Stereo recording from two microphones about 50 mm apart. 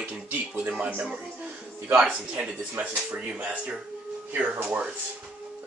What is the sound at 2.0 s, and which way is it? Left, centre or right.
Speech, right.